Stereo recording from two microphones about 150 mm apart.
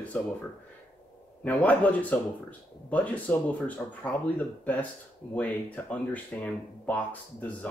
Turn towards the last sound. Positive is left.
turn(degrees=10)  # may be behind; listen again after turning